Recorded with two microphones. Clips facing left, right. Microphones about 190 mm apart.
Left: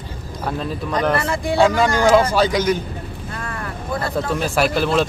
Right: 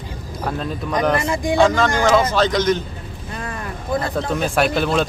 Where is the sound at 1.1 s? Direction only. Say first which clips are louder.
Right 1 dB; 15° right (ahead or behind).